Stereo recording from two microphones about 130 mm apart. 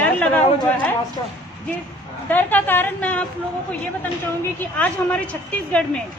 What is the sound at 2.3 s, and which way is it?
Speech, 15° left (ahead or behind).